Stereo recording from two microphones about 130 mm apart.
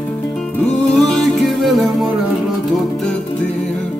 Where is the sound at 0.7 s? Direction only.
5° left (ahead or behind).